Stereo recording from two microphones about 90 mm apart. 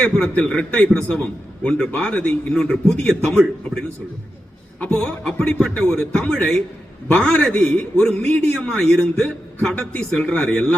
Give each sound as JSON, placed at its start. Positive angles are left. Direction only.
{"t": 0.0, "sound": "a man's voice", "side_deg": 15}